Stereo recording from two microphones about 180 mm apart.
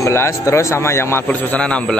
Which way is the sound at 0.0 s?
15° left (ahead or behind).